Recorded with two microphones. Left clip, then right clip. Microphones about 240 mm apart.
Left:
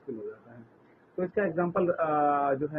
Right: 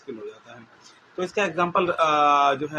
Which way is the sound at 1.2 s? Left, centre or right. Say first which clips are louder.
Right 5 dB; left.